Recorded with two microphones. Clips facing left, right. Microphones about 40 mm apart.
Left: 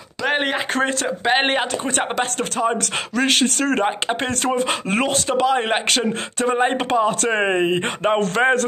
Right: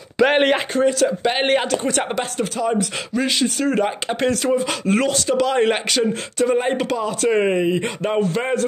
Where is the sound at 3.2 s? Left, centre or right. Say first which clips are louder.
Left 2 dB; left.